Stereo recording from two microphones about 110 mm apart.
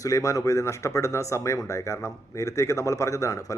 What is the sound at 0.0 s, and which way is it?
A man's voice, 30° left (ahead or behind).